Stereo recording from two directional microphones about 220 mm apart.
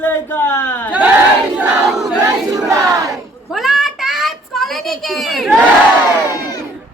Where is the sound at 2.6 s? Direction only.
15° right (ahead or behind).